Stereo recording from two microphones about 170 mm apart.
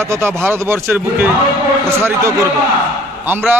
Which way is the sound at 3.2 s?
10° right (ahead or behind).